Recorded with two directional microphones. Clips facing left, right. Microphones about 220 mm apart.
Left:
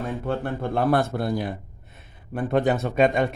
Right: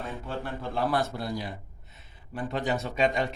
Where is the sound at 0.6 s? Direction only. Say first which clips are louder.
Left 6 dB; 55° left (ahead or behind).